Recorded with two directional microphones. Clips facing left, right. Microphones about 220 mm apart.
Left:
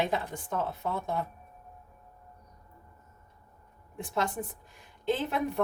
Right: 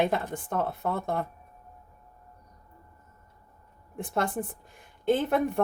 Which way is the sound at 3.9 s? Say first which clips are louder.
Right 3 dB; 55° right (ahead or behind).